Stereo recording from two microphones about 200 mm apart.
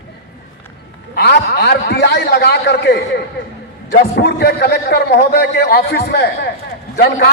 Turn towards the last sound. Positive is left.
turn(degrees=50)  # may be behind; listen again after turning